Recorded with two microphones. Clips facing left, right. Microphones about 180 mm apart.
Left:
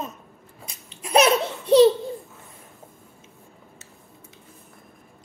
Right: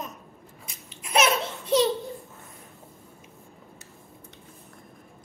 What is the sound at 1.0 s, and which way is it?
Baby laughter, 35° left (ahead or behind).